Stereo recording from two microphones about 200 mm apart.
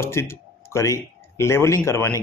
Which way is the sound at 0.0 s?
15° left (ahead or behind).